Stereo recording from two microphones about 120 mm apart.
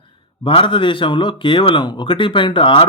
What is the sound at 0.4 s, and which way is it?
Speech, 45° left (ahead or behind).